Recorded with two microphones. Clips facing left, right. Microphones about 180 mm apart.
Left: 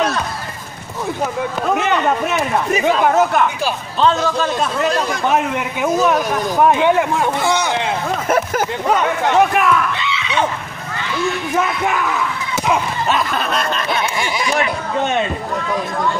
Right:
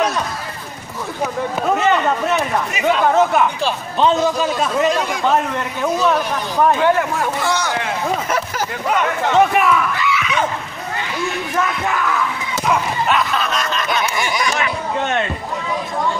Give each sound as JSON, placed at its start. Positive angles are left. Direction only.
{"t": 1.8, "sound": "speech", "side_deg": 15}
{"t": 3.1, "sound": "speech", "side_deg": 0}
{"t": 4.0, "sound": "a man's voice", "side_deg": -10}
{"t": 5.2, "sound": "speech", "side_deg": 15}
{"t": 9.3, "sound": "speech", "side_deg": 0}
{"t": 9.9, "sound": "a sound", "side_deg": 25}
{"t": 13.7, "sound": "snicker", "side_deg": 30}